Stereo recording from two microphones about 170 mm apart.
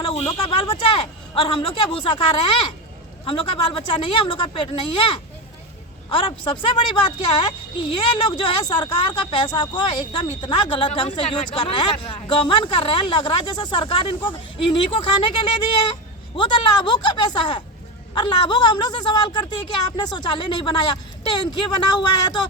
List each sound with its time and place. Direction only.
0.3 s speech: 30° left (ahead or behind)
7.9 s speech: 30° left (ahead or behind)